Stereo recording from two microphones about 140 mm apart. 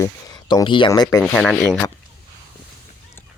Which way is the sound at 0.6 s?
35° left (ahead or behind).